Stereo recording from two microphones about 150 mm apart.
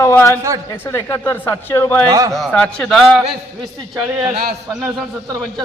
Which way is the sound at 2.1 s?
25° right (ahead or behind).